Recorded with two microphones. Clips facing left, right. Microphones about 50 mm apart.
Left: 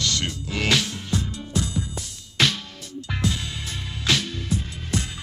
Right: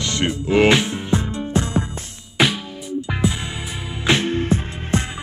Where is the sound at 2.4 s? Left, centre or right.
Centre.